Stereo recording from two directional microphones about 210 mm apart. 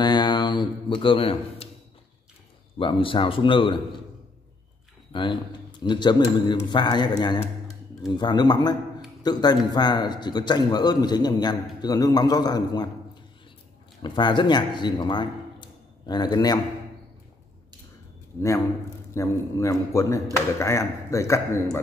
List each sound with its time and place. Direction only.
0.0 s speech: 20° left (ahead or behind)
2.8 s a man's voice: 25° left (ahead or behind)
5.1 s a man's voice: 25° left (ahead or behind)
14.0 s a man's voice: 20° left (ahead or behind)
19.1 s a man's voice: 15° left (ahead or behind)